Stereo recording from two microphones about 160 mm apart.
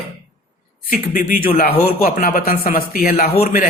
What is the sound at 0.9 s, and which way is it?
A man's voice, 60° left (ahead or behind).